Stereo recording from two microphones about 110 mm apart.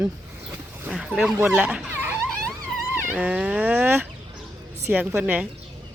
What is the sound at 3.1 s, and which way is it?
A woman's voice, 10° right (ahead or behind).